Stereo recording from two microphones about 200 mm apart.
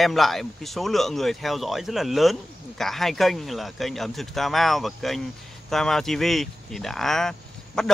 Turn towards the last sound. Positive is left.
turn(degrees=5)  # may be behind; listen again after turning